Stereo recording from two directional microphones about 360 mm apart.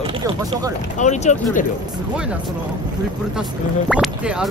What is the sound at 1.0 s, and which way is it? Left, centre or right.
Speech, centre.